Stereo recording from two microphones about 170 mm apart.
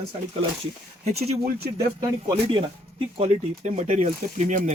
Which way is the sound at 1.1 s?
40° right (ahead or behind).